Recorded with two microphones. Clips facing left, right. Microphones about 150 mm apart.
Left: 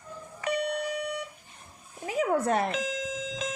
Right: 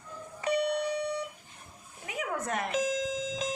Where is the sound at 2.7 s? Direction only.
40° right (ahead or behind).